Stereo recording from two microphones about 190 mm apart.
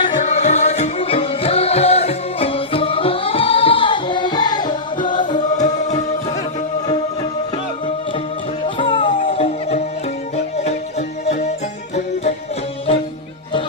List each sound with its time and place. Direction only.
0.0 s music: 35° left (ahead or behind)
5.5 s music: 40° left (ahead or behind)
8.6 s music: 30° left (ahead or behind)